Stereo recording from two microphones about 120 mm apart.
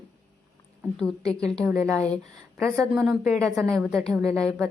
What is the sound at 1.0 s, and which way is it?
Speech, 5° left (ahead or behind).